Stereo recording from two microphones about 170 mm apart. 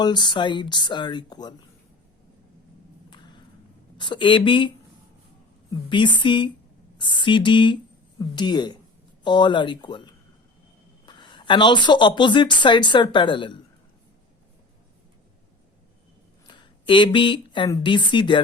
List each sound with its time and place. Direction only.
0.0 s speech: 25° left (ahead or behind)
3.1 s a sound: 25° left (ahead or behind)
3.9 s speech: 25° left (ahead or behind)
5.9 s speech: 30° left (ahead or behind)
16.5 s a sound: 25° left (ahead or behind)
17.8 s speech: 30° left (ahead or behind)